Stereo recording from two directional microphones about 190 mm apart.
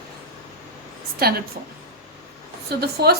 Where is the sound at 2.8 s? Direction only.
55° right (ahead or behind).